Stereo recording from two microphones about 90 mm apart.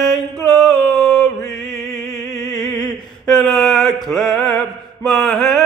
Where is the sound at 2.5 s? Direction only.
5° left (ahead or behind).